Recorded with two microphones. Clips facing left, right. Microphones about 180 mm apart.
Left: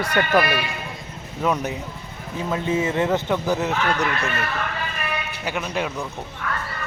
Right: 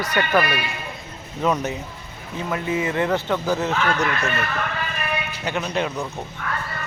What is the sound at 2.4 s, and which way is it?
Speech, 25° left (ahead or behind).